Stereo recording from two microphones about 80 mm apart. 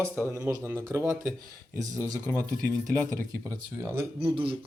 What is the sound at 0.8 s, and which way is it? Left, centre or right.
Speech, right.